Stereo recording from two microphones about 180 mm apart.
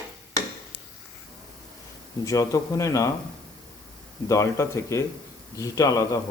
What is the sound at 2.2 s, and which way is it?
Speech, 20° left (ahead or behind).